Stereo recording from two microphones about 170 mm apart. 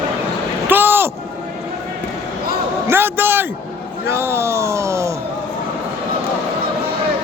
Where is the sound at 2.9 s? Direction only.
15° right (ahead or behind).